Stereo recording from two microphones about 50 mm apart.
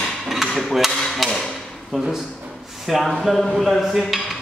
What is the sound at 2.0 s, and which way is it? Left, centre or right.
A man's voice, centre.